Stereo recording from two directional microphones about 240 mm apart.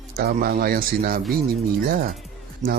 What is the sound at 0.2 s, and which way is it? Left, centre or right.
Speech, right.